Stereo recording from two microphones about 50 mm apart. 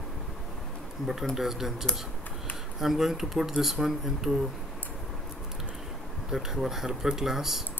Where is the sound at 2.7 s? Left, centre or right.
Centre.